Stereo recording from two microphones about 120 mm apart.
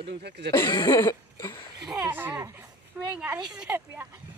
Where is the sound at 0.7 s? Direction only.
35° left (ahead or behind).